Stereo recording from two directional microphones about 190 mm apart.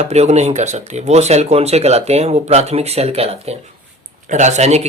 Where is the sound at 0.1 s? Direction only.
35° right (ahead or behind).